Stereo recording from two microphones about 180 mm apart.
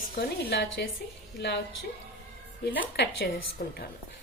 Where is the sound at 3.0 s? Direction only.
70° left (ahead or behind).